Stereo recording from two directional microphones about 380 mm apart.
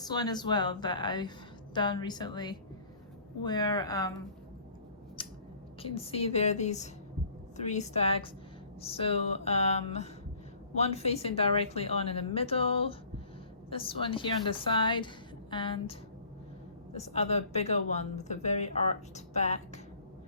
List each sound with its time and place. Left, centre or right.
0.0 s a woman's voice: centre
5.2 s scissors: centre
5.8 s a woman's voice: centre